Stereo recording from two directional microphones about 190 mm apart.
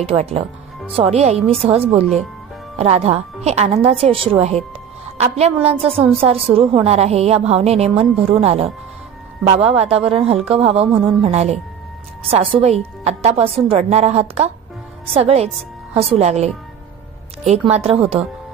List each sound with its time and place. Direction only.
0.0 s a woman's voice: 30° right (ahead or behind)